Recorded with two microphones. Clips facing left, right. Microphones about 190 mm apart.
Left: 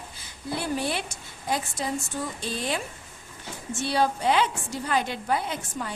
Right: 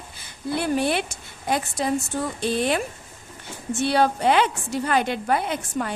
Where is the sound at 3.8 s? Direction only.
65° right (ahead or behind).